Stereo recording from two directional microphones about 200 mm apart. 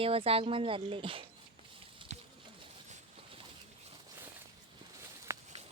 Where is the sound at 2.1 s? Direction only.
35° right (ahead or behind).